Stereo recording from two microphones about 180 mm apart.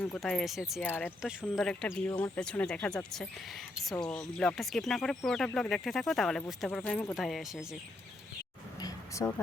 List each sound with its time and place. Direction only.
0.0 s speech: 5° left (ahead or behind)
0.9 s speech: 10° left (ahead or behind)
1.2 s speech: centre (ahead or behind)
8.8 s a sound: 15° left (ahead or behind)